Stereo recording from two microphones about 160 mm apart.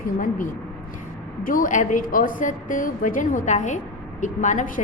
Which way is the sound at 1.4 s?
60° left (ahead or behind).